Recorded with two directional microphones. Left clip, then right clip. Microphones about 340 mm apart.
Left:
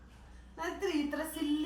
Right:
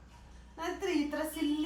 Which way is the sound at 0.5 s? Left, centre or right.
Centre.